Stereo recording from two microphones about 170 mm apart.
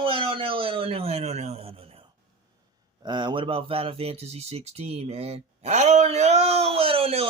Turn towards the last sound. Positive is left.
turn(degrees=-35)  # may be behind; listen again after turning